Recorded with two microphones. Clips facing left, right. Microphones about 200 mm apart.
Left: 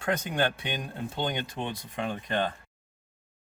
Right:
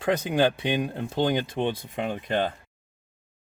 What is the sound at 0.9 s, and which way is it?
Speech, 25° right (ahead or behind).